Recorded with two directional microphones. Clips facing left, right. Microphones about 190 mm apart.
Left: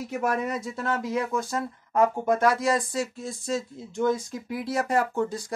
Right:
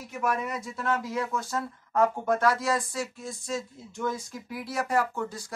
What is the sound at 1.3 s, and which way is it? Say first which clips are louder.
Speech: left 3 dB; 15° left (ahead or behind).